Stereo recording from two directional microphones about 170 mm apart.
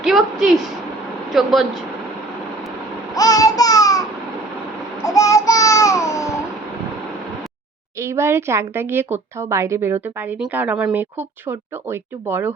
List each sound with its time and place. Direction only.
0.0 s a woman's voice: centre (ahead or behind)
3.2 s babbling: 20° left (ahead or behind)
5.0 s a sound: 20° left (ahead or behind)
8.0 s a woman's voice: 15° right (ahead or behind)